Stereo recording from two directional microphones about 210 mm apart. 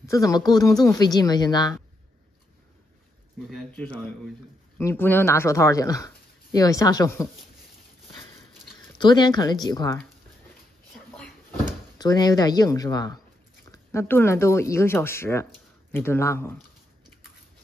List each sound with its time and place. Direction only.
0.0 s speech: 15° left (ahead or behind)
3.4 s speech: centre (ahead or behind)
8.9 s speech: 20° left (ahead or behind)
12.0 s speech: 20° left (ahead or behind)